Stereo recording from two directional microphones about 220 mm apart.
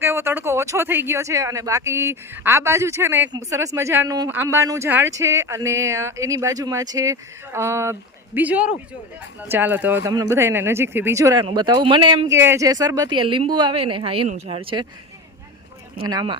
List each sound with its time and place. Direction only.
0.0 s a woman's voice: 10° right (ahead or behind)
16.0 s a woman's voice: 20° right (ahead or behind)